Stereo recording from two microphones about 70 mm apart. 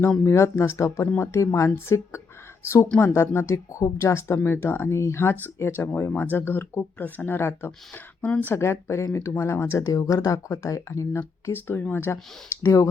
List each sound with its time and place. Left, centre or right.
0.3 s speech: left
8.2 s speech: left
8.5 s speech: left
11.5 s speech: left